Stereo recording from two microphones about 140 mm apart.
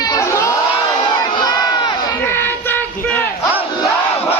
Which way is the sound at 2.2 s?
15° left (ahead or behind).